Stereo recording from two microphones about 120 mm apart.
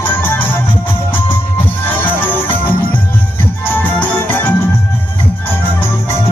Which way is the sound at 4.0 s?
15° left (ahead or behind).